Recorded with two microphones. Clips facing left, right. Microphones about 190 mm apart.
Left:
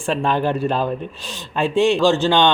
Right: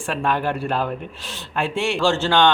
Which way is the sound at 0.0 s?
25° left (ahead or behind).